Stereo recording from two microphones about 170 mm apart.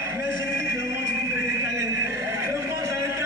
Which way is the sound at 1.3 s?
15° right (ahead or behind).